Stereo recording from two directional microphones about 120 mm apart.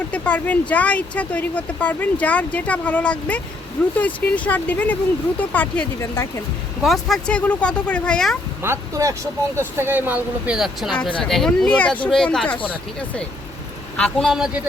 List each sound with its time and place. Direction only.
0.1 s speech: 10° left (ahead or behind)
6.0 s speech: 25° left (ahead or behind)
6.8 s speech: centre (ahead or behind)
8.6 s speech: 25° right (ahead or behind); by 12.5 s 5° left (ahead or behind)
13.9 s speech: 5° left (ahead or behind)